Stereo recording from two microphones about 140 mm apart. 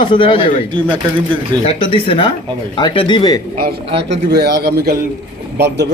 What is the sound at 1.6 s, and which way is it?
Speech, 40° left (ahead or behind).